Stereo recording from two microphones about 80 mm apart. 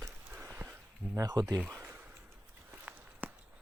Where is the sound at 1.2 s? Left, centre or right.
Right.